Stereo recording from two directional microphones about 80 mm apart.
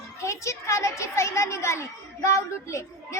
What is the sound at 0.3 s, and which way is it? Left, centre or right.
A woman's voice, left.